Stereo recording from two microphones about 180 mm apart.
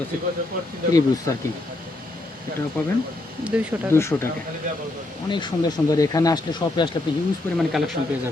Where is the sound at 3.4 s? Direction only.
5° right (ahead or behind).